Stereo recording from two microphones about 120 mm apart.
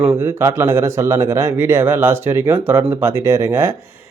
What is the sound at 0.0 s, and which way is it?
A man's voice, 15° right (ahead or behind).